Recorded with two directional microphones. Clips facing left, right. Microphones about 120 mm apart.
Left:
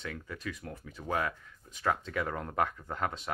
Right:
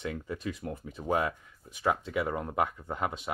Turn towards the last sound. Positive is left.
turn(degrees=-15)  # may be behind; listen again after turning